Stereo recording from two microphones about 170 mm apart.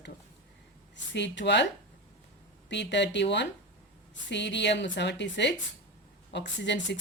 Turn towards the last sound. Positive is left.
turn(degrees=90)